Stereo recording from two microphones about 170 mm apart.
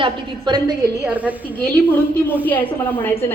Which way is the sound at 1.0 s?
10° right (ahead or behind).